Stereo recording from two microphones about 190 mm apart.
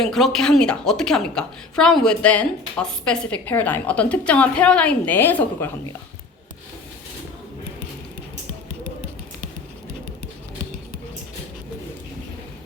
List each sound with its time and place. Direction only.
0.0 s a woman's voice: centre (ahead or behind)